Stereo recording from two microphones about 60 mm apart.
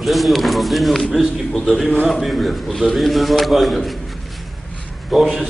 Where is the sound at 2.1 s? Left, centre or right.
Centre.